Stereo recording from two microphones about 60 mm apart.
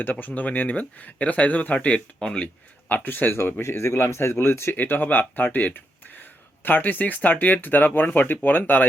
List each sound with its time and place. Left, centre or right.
0.0 s speech: left
2.9 s speech: left
4.7 s speech: left